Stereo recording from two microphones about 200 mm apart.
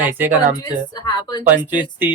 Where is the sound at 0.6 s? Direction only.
20° left (ahead or behind).